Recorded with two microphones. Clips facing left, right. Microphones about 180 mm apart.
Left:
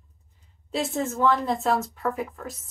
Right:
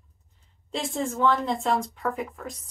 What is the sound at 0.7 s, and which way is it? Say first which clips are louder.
Speech: left 2 dB; 5° left (ahead or behind).